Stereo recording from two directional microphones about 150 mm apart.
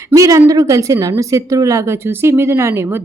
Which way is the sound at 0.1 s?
20° right (ahead or behind).